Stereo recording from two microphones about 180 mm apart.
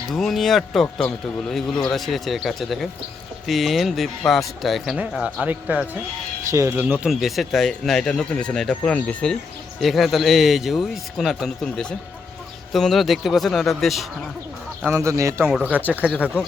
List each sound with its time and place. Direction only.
0.1 s speech: centre (ahead or behind)
14.8 s speech: 15° right (ahead or behind)